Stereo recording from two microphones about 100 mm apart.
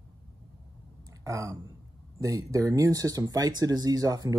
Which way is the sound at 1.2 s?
30° right (ahead or behind).